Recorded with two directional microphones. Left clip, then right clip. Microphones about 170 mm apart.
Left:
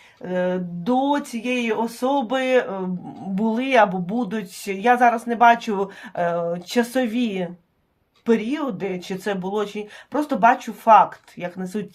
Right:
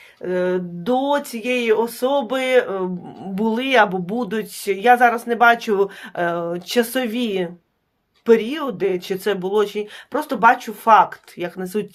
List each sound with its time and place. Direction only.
0.2 s speech: 35° right (ahead or behind)